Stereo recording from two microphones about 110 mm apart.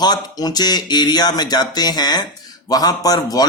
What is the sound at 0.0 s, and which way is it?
Speech, 40° left (ahead or behind).